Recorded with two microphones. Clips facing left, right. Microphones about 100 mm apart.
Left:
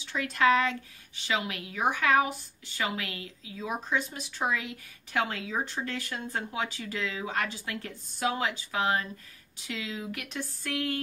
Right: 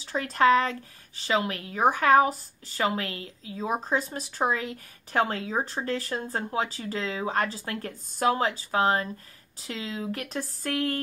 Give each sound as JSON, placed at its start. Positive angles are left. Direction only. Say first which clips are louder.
{"t": 0.0, "sound": "speech", "louder": "right 3 dB", "side_deg": -40}